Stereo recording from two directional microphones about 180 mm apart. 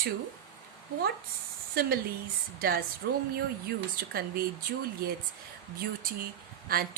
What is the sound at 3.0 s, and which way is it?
Speech, 70° right (ahead or behind).